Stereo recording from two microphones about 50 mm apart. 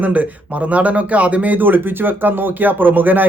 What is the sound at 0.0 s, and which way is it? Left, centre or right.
A man's voice, right.